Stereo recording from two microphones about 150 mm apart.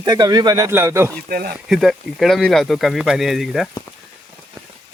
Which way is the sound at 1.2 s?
80° right.